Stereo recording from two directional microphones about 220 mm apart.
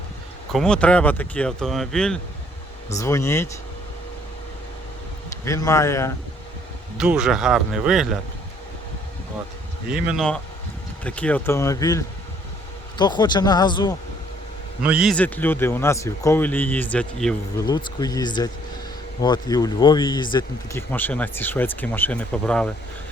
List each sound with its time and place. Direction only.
0.5 s speech: 5° left (ahead or behind)
3.0 s speech: 15° left (ahead or behind)
5.5 s speech: 15° left (ahead or behind)
6.9 s speech: 5° right (ahead or behind)
9.9 s speech: centre (ahead or behind); by 13.9 s 20° left (ahead or behind)
14.8 s speech: 5° right (ahead or behind)
17.6 s speech: 20° left (ahead or behind)
20.9 s speech: 10° left (ahead or behind)